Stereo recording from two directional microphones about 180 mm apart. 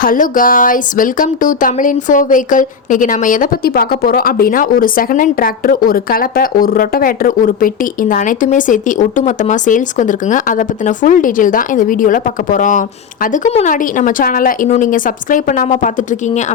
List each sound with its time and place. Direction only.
0.0 s speech: 50° left (ahead or behind)